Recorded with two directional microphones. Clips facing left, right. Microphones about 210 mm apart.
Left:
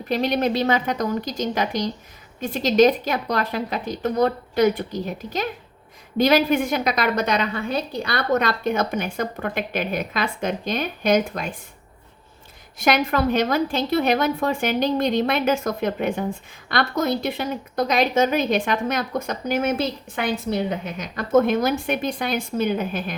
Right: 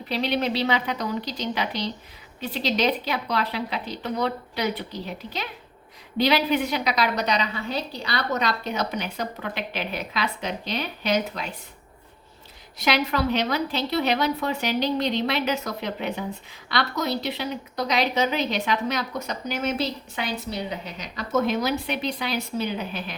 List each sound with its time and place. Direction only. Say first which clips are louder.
0.1 s a woman's voice: left 4 dB; 45° left (ahead or behind)
12.8 s a woman's voice: left 4 dB; 50° left (ahead or behind)